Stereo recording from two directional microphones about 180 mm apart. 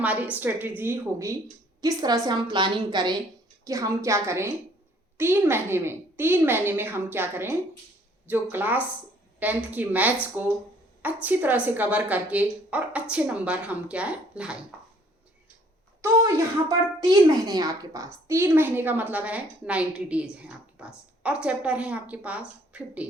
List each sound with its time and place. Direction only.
0.0 s a woman's voice: 10° right (ahead or behind)
16.0 s speech: 20° right (ahead or behind)